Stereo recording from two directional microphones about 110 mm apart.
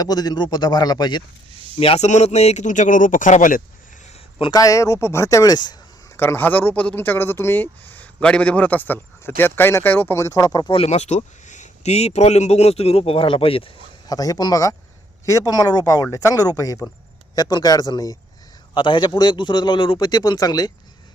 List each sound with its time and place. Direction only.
0.0 s a man's voice: 35° left (ahead or behind)
1.8 s speech: 75° left (ahead or behind)
4.5 s speech: 30° left (ahead or behind)
6.1 s speech: 20° left (ahead or behind)
10.8 s speech: 90° left; by 13.7 s 55° left (ahead or behind)
14.1 s a man's voice: 35° left (ahead or behind)
18.7 s a man's voice: 45° left (ahead or behind)